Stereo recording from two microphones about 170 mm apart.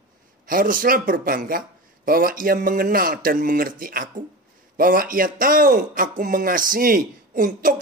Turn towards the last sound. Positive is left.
turn(degrees=-55)  # may be behind; listen again after turning